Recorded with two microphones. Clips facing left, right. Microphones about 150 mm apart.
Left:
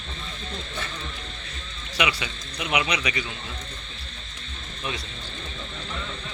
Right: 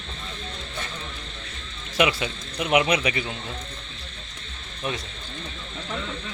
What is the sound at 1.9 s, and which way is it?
Speech, 50° right (ahead or behind).